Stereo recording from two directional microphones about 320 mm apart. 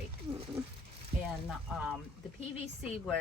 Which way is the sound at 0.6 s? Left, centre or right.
Centre.